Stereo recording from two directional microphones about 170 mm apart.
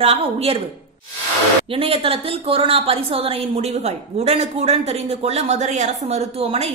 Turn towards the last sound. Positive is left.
turn(degrees=-35)  # may be behind; listen again after turning